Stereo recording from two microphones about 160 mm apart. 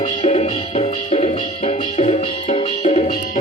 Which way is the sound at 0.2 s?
40° left (ahead or behind).